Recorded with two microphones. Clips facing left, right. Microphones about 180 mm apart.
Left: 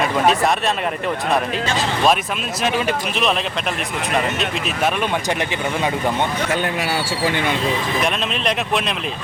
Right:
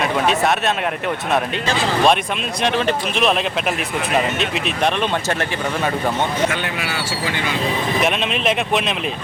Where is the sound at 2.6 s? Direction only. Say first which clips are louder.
Right 1 dB; 10° left (ahead or behind).